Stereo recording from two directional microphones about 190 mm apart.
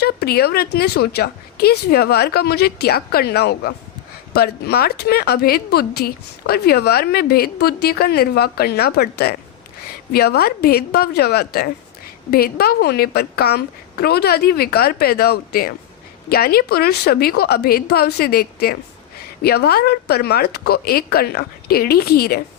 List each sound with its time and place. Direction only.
0.0 s a woman's voice: 55° left (ahead or behind)